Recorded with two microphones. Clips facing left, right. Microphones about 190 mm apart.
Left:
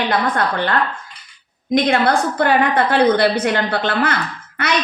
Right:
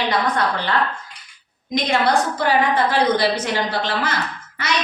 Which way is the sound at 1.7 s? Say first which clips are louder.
Left 3 dB; 55° left (ahead or behind).